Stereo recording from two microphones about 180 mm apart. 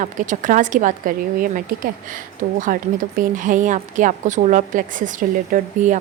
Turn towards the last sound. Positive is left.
turn(degrees=-45)  # may be behind; listen again after turning